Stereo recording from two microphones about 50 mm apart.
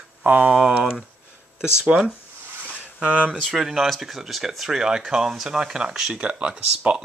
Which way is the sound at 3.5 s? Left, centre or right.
Centre.